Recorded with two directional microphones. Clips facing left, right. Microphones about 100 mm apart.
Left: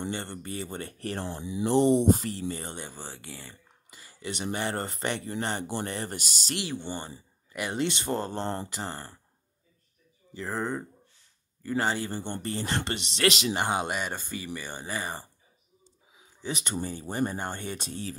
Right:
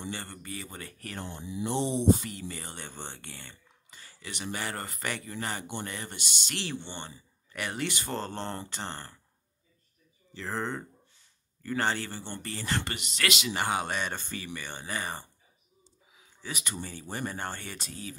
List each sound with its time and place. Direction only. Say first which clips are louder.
0.1 s speech: left 4 dB; 25° left (ahead or behind)
1.9 s speech: left 4 dB; 50° left (ahead or behind)
2.2 s speech: left 6 dB; 30° left (ahead or behind)
2.8 s speech: left 1 dB; 5° left (ahead or behind); by 6.5 s 40° left (ahead or behind)
6.5 s speech: left 3 dB; 10° left (ahead or behind)
6.8 s speech: left 5 dB; 40° left (ahead or behind)
7.7 s speech: left 6 dB; 25° left (ahead or behind); by 9.0 s 5° left (ahead or behind)
10.3 s speech: left 2 dB; 10° left (ahead or behind)
12.4 s speech: left 1 dB; 25° left (ahead or behind)
13.5 s speech: left 2 dB; 20° left (ahead or behind)
16.2 s speech: left 5 dB; 25° left (ahead or behind)